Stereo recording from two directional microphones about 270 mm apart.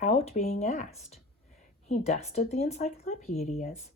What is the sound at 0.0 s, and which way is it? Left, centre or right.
Speech, left.